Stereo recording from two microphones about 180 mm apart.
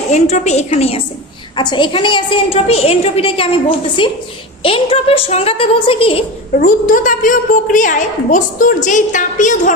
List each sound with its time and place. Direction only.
0.1 s a woman's voice: 40° left (ahead or behind)
6.6 s a woman's voice: 50° left (ahead or behind)